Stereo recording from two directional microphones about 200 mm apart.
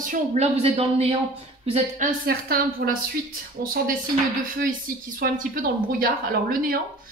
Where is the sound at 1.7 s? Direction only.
40° right (ahead or behind).